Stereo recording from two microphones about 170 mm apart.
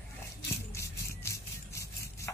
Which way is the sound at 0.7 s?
15° left (ahead or behind).